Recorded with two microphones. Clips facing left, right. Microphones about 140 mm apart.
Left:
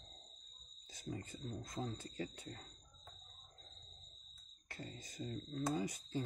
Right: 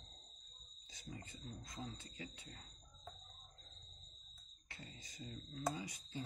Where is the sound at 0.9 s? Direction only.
45° left (ahead or behind).